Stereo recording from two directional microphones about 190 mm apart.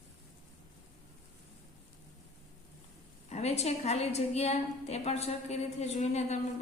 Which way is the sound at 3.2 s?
35° left (ahead or behind).